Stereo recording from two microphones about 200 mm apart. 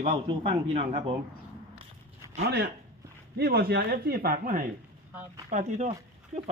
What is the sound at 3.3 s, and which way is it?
Speech, 55° right (ahead or behind).